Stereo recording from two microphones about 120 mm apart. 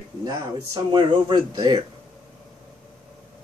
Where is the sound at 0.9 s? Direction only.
35° right (ahead or behind).